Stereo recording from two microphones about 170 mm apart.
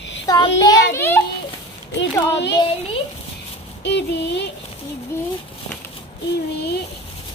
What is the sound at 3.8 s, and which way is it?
Child singing, 85° left.